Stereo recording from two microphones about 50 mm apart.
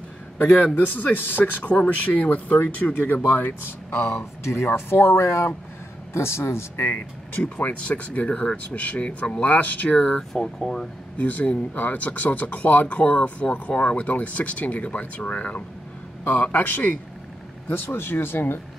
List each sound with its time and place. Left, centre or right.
0.4 s speech: left
1.7 s speech: left
3.3 s speech: left
7.6 s speech: left
10.3 s speech: centre
11.1 s speech: left